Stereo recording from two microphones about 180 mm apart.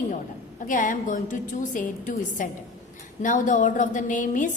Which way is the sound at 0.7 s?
45° left (ahead or behind).